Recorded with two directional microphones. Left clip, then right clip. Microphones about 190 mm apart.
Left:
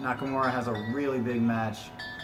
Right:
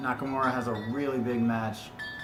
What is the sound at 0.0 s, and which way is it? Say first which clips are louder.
Speech: even; centre (ahead or behind).